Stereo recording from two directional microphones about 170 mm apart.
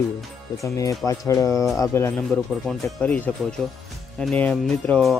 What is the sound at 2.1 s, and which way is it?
Speech, 5° left (ahead or behind).